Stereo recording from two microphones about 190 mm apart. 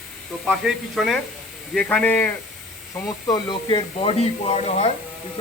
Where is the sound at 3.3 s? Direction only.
25° left (ahead or behind).